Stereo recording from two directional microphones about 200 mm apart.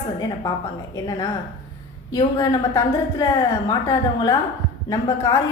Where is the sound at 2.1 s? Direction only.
20° left (ahead or behind).